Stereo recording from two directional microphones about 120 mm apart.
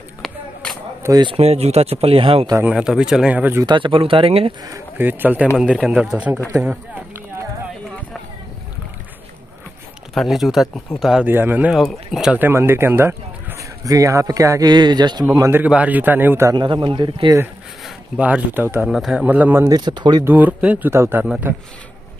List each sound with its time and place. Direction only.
1.2 s speech: 55° right (ahead or behind)
2.6 s a man's voice: 5° right (ahead or behind)
3.6 s speech: 45° right (ahead or behind)
4.9 s a man's voice: 15° right (ahead or behind)
10.1 s speech: centre (ahead or behind)
11.2 s a man's voice: 15° right (ahead or behind)
11.7 s speech: centre (ahead or behind)
12.4 s speech: 20° right (ahead or behind); by 15.2 s 35° right (ahead or behind)
15.5 s a man's voice: 10° right (ahead or behind)
16.5 s speech: 40° right (ahead or behind)
17.8 s speech: 10° right (ahead or behind)
18.9 s a man's voice: 5° right (ahead or behind)
19.7 s speech: 40° right (ahead or behind)
20.2 s a man's voice: 15° right (ahead or behind)